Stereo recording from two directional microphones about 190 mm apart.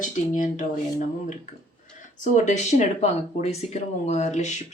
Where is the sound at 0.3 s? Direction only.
45° left (ahead or behind).